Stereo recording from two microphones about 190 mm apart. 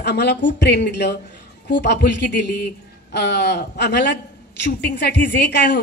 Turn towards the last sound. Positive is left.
turn(degrees=65)  # may be behind; listen again after turning